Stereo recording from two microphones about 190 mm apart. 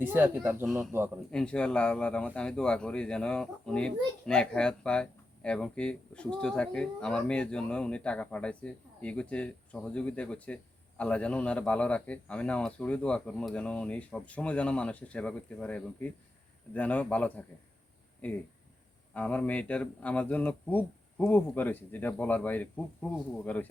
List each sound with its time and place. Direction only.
0.0 s speech: 10° right (ahead or behind)
1.3 s speech: 5° left (ahead or behind)